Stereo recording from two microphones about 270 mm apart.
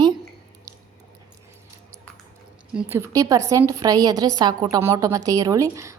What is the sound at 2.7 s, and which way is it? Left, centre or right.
A woman's voice, centre.